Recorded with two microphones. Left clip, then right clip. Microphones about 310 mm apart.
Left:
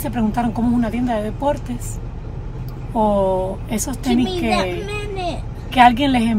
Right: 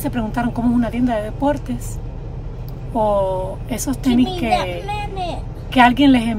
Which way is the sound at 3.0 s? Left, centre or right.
Centre.